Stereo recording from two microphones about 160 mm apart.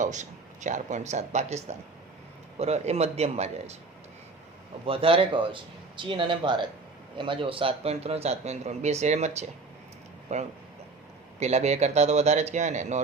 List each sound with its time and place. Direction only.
0.0 s speech: 50° right (ahead or behind)
4.9 s a man's voice: 35° right (ahead or behind)